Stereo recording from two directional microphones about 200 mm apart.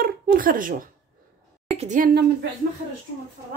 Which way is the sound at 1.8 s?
40° right (ahead or behind).